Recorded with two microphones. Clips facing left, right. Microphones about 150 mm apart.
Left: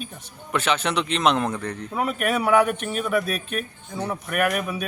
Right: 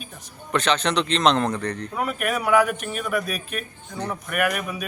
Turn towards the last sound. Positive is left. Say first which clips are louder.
# left 1 dB
turn(degrees=0)  # may be behind; listen again after turning